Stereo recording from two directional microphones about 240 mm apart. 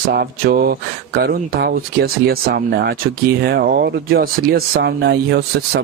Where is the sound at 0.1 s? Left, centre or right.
Right.